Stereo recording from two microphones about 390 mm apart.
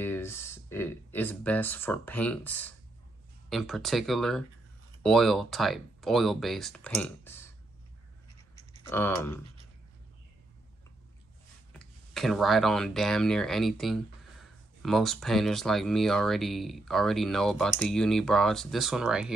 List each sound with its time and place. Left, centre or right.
0.0 s speech: centre
8.8 s speech: centre
11.7 s speech: centre